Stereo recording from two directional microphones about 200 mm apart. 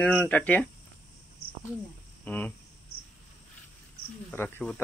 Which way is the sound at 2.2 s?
10° left (ahead or behind).